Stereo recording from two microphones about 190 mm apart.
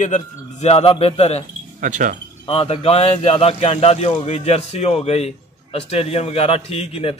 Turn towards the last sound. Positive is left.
turn(degrees=30)  # may be behind; listen again after turning